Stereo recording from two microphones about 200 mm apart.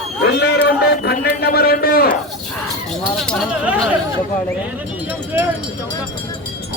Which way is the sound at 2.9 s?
Centre (ahead or behind).